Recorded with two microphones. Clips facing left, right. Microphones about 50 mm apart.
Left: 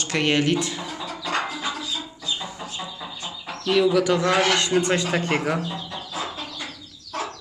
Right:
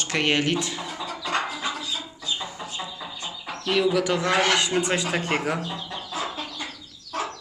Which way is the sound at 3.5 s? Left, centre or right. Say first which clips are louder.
Left 3 dB; centre.